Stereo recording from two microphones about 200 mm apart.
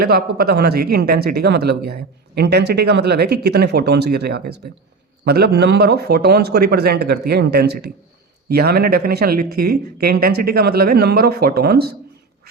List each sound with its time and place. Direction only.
0.0 s speech: 50° right (ahead or behind)